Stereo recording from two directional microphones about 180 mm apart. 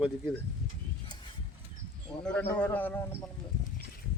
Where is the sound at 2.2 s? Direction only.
5° left (ahead or behind).